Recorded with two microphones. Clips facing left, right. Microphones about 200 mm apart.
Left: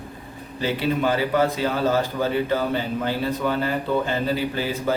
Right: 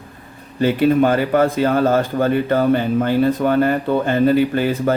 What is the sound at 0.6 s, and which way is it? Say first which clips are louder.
Speech: right 9 dB; 55° right (ahead or behind).